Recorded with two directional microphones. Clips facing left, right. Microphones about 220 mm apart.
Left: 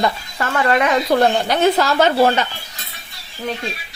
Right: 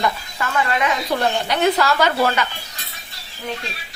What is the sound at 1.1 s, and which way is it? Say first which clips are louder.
Speech: left 8 dB; 45° left (ahead or behind).